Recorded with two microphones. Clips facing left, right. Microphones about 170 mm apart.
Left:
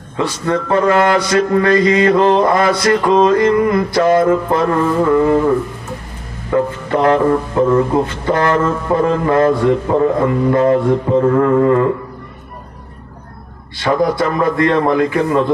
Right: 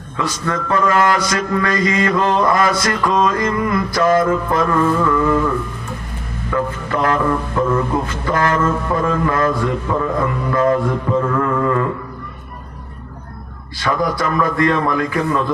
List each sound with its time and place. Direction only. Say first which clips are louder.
0.4 s mantra: left 4 dB; 30° left (ahead or behind)
3.0 s music: left 4 dB; 40° left (ahead or behind)
3.3 s a man's voice: left 6 dB; 30° left (ahead or behind)
6.5 s mantra: left 5 dB; 30° left (ahead or behind)
8.4 s a man's voice: left 3 dB; 30° left (ahead or behind)
13.9 s a man's voice: left 4 dB; 35° left (ahead or behind)
14.3 s mantra: left 1 dB; 25° left (ahead or behind)